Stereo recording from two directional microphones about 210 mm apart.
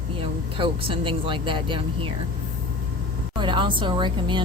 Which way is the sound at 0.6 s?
25° right (ahead or behind).